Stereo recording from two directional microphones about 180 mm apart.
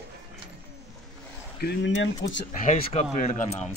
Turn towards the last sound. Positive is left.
turn(degrees=40)  # may be behind; listen again after turning